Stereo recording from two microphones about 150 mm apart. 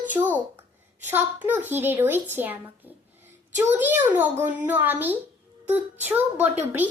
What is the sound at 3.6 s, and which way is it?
A woman's voice, 10° right (ahead or behind).